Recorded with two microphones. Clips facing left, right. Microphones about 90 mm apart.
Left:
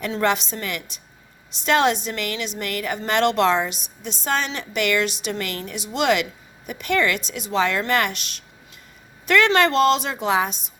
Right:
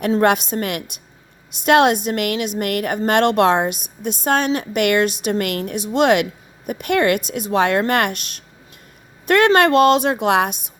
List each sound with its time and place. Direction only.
0.1 s a woman's voice: 50° right (ahead or behind)